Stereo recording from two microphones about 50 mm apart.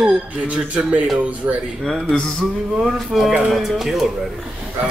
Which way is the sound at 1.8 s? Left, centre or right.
Centre.